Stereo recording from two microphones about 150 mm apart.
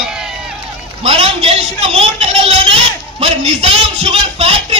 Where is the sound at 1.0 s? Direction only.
40° right (ahead or behind).